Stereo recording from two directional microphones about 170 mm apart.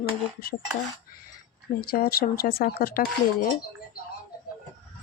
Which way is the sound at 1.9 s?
65° left (ahead or behind).